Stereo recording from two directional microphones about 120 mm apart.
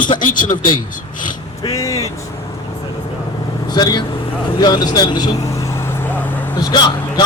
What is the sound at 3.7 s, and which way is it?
A man's voice, 35° left (ahead or behind).